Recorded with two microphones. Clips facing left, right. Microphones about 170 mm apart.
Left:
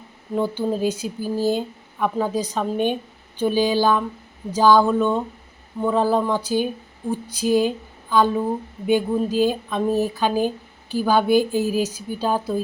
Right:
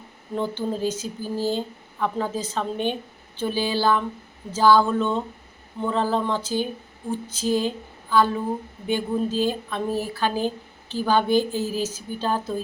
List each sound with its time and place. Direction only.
0.3 s speech: 10° left (ahead or behind)